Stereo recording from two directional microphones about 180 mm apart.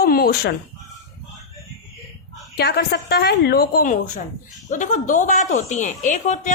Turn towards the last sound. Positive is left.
turn(degrees=40)  # may be behind; listen again after turning